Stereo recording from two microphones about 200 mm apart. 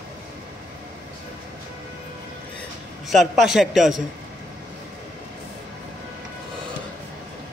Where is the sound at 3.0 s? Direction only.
Centre (ahead or behind).